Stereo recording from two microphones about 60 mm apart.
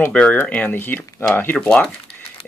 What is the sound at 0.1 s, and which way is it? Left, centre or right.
Speech, centre.